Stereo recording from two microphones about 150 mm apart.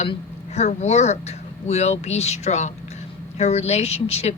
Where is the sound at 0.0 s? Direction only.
45° left (ahead or behind).